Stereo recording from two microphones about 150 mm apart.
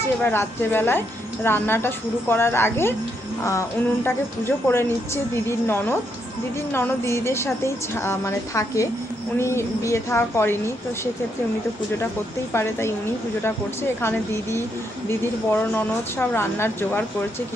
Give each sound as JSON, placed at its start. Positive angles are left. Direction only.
{"t": 0.2, "sound": "speech", "side_deg": 15}
{"t": 13.4, "sound": "speech", "side_deg": 15}